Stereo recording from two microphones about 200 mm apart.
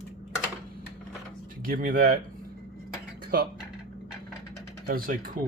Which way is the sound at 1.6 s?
45° right (ahead or behind).